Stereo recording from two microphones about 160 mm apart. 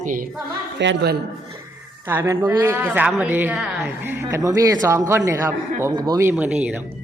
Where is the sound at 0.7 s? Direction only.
90° right.